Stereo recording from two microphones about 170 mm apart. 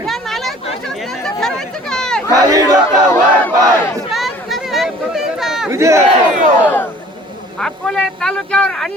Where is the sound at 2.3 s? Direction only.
20° right (ahead or behind).